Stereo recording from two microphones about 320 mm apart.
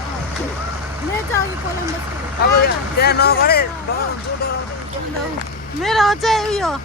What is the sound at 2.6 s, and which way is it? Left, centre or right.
Speech, left.